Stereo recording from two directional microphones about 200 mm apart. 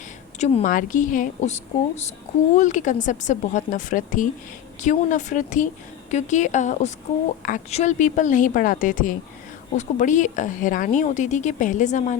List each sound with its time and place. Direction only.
0.3 s speech: 35° left (ahead or behind)